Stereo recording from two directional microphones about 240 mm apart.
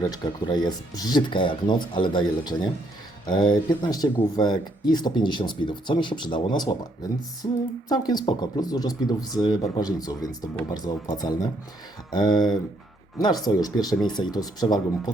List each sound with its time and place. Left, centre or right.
0.1 s speech: centre
7.4 s a sound: centre
7.9 s speech: centre